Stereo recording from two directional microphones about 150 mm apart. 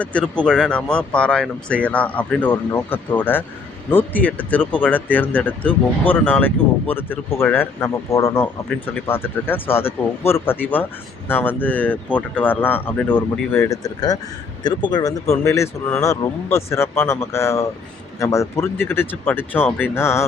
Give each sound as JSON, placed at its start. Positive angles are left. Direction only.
{"t": 0.0, "sound": "speech", "side_deg": 10}